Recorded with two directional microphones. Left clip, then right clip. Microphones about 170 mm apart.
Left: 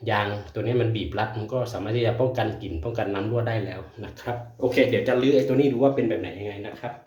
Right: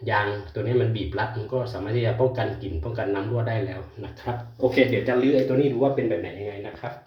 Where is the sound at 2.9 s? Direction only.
20° left (ahead or behind).